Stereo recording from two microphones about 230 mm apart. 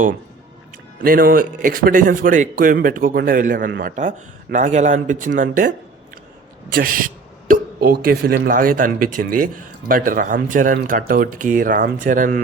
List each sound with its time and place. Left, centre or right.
0.9 s speech: right